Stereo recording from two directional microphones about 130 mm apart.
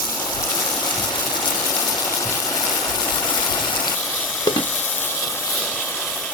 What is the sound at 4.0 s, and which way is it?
Water, 5° left (ahead or behind).